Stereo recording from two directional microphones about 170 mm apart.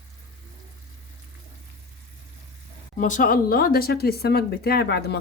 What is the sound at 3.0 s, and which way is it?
Speech, 50° left (ahead or behind).